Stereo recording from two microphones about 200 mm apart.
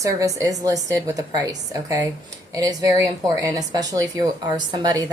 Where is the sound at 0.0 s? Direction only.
15° right (ahead or behind).